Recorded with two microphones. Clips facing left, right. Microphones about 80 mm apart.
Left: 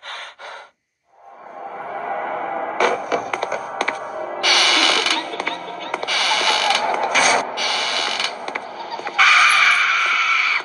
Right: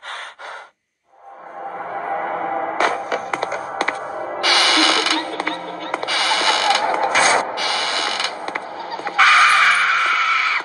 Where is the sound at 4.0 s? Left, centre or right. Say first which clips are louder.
Right 1 dB; centre.